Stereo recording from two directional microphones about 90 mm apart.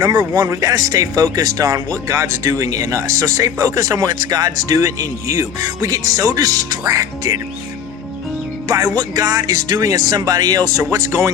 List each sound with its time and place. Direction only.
0.0 s speech: 40° right (ahead or behind)
8.6 s speech: 40° right (ahead or behind)
10.8 s speech: 30° right (ahead or behind)